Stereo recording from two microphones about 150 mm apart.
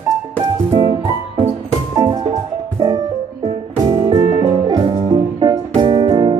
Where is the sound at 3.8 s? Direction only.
35° right (ahead or behind).